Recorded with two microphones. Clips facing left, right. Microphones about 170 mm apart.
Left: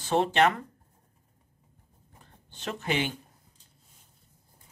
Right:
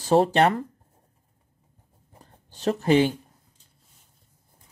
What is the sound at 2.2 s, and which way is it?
Speech, 40° right (ahead or behind).